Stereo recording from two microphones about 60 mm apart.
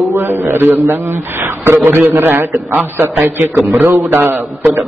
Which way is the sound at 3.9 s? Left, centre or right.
Right.